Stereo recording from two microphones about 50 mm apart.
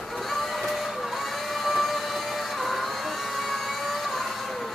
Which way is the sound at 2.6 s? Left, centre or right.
Centre.